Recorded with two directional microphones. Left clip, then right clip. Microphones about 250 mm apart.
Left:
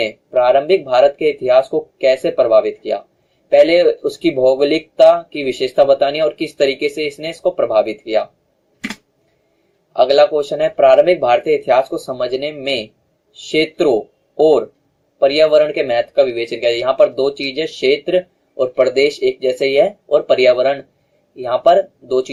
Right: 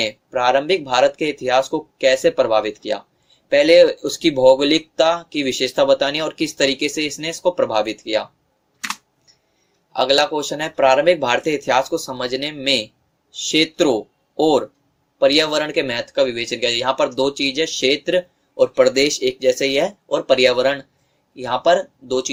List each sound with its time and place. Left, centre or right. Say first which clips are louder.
0.0 s speech: left 4 dB; right
9.9 s speech: left 5 dB; right